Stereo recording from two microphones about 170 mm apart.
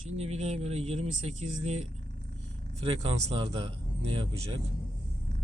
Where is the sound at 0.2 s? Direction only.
40° right (ahead or behind).